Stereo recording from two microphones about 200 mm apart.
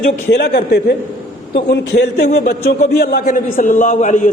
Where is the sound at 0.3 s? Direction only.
55° left (ahead or behind).